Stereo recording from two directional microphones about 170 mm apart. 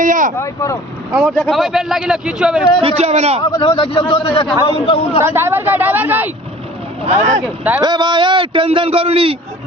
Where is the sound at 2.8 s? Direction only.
40° right (ahead or behind).